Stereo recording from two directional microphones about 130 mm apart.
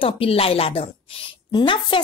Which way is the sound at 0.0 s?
45° left (ahead or behind).